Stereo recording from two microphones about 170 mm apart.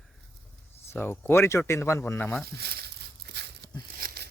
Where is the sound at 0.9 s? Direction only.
10° left (ahead or behind).